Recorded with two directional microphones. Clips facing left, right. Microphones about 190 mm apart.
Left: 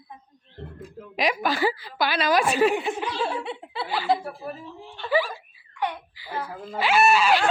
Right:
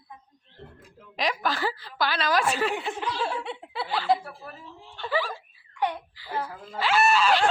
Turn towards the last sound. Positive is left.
turn(degrees=10)  # may be behind; listen again after turning